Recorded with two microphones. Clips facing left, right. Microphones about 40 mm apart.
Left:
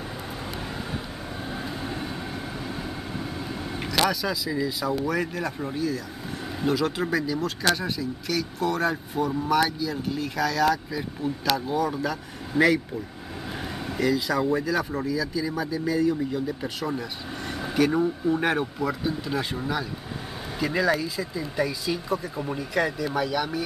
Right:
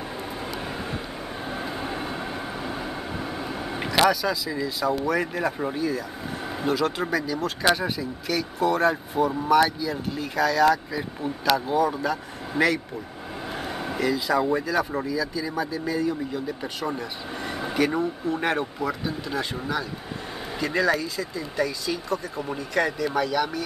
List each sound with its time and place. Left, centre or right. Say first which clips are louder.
1.5 s vehicle: right 2 dB; centre
4.1 s speech: right 2 dB; centre
6.6 s speech: even; centre
7.3 s speech: right 2 dB; centre